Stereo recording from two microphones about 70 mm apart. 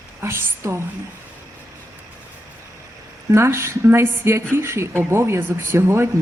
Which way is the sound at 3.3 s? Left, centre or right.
Right.